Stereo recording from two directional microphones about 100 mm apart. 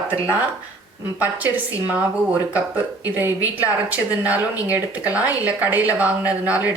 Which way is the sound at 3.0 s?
20° right (ahead or behind).